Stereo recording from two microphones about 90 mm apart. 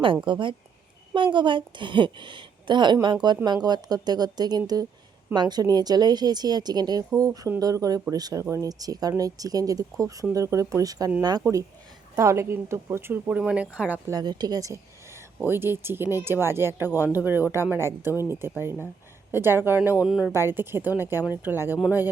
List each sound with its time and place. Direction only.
0.3 s a woman's voice: 60° right (ahead or behind); by 11.4 s 45° right (ahead or behind)
12.1 s speech: 35° right (ahead or behind)
13.4 s speech: 10° right (ahead or behind)
14.1 s speech: 50° right (ahead or behind)
15.4 s speech: 25° right (ahead or behind)
18.1 s speech: 40° left (ahead or behind)
18.3 s speech: 25° right (ahead or behind)
20.1 s speech: centre (ahead or behind)
20.3 s speech: 25° right (ahead or behind)